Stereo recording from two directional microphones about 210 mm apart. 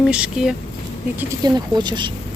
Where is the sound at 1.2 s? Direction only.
15° right (ahead or behind).